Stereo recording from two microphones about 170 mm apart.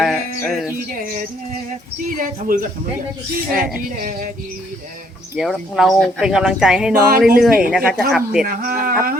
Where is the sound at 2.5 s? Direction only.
55° right (ahead or behind).